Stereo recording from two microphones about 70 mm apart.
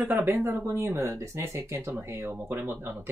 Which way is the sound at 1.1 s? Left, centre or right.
Right.